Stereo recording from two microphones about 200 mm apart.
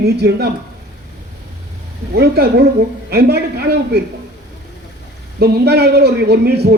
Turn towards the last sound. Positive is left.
turn(degrees=-55)  # may be behind; listen again after turning